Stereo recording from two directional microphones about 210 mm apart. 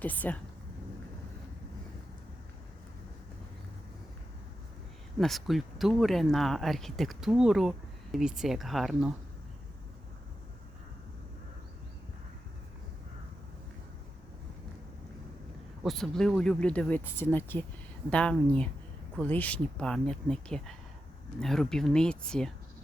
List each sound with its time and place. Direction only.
0.0 s speech: 10° left (ahead or behind)
5.2 s speech: centre (ahead or behind)
15.8 s speech: centre (ahead or behind)